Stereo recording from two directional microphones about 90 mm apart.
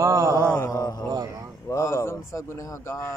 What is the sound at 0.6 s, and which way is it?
Speech, 45° left (ahead or behind).